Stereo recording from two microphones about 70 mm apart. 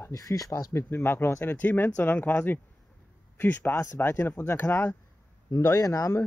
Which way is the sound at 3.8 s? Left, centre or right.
Left.